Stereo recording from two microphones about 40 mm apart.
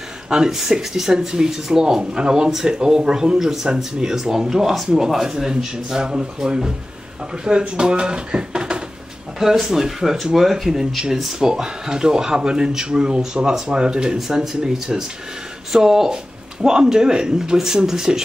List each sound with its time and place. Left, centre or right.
0.3 s speech: centre
9.4 s speech: centre